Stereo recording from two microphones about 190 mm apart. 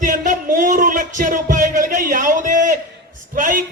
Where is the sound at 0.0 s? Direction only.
45° right (ahead or behind).